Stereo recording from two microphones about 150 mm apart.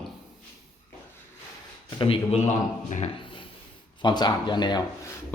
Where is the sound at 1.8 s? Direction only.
35° left (ahead or behind).